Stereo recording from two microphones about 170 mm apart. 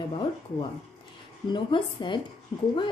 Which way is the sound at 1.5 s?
30° left (ahead or behind).